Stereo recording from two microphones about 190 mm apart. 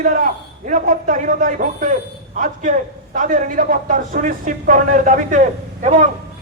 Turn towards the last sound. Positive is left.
turn(degrees=-40)  # may be behind; listen again after turning